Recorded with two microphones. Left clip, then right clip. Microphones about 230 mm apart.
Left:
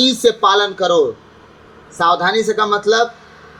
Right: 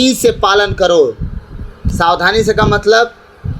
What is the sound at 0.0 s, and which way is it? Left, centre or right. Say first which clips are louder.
Speech: right 1 dB; right.